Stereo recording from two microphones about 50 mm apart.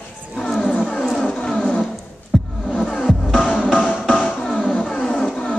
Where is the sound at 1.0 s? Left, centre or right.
Centre.